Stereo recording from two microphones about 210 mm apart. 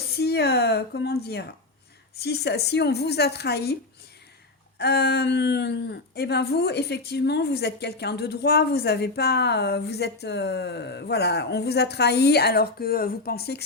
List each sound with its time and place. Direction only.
0.1 s speech: 50° left (ahead or behind)
4.8 s speech: 50° left (ahead or behind)